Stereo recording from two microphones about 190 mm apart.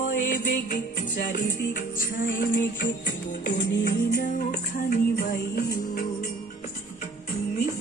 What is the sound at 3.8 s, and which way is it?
Music, 55° left (ahead or behind).